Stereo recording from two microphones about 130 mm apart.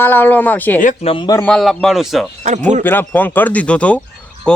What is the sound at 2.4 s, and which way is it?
Speech, 65° right (ahead or behind).